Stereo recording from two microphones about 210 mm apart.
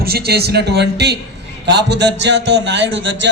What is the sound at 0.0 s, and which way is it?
A man's voice, 50° right (ahead or behind).